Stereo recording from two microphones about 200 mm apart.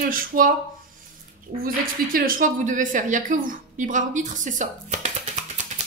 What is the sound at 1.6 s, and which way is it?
Speech, 45° right (ahead or behind).